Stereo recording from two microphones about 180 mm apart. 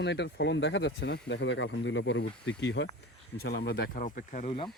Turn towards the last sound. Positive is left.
turn(degrees=45)  # may be behind; listen again after turning